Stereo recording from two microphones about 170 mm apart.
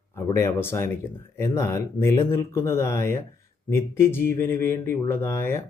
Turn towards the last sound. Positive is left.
turn(degrees=15)  # may be behind; listen again after turning